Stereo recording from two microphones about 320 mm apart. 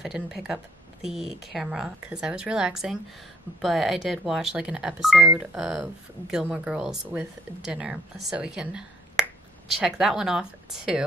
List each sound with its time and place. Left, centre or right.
0.0 s speech: centre